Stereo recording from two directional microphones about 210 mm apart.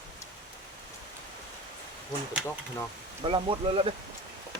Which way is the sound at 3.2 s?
25° right (ahead or behind).